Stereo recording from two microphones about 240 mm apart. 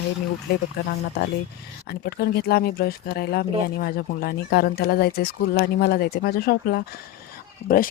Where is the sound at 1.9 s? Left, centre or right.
Left.